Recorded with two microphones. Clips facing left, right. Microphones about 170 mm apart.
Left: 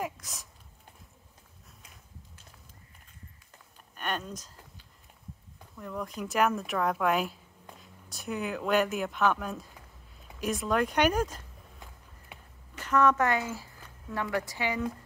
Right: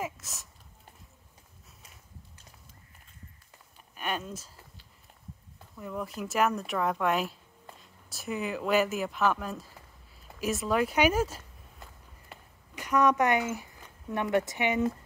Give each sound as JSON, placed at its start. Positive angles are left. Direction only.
{"t": 0.0, "sound": "speech", "side_deg": 0}
{"t": 3.9, "sound": "speech", "side_deg": -5}
{"t": 5.8, "sound": "speech", "side_deg": -5}